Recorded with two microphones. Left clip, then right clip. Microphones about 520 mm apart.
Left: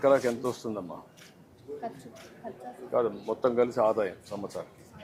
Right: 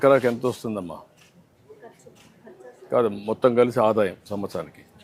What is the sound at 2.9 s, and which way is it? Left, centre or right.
Speech, right.